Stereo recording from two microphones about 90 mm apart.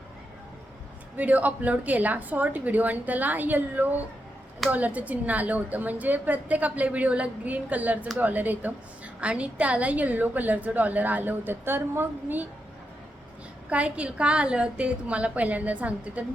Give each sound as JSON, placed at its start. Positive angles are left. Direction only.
{"t": 1.1, "sound": "a woman's voice", "side_deg": -20}
{"t": 13.7, "sound": "a woman's voice", "side_deg": -15}